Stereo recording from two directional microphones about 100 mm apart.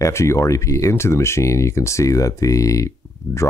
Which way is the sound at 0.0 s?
30° left (ahead or behind).